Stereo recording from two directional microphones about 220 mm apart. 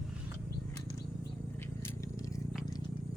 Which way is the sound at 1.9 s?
15° left (ahead or behind).